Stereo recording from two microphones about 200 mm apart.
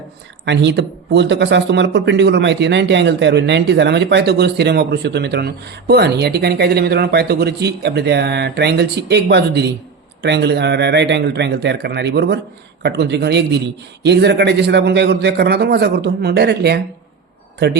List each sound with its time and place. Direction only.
0.4 s speech: 60° right (ahead or behind)